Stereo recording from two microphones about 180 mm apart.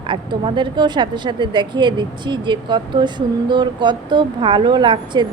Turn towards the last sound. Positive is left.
turn(degrees=-25)  # may be behind; listen again after turning